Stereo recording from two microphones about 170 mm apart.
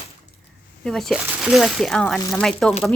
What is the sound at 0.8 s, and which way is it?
Speech, centre (ahead or behind).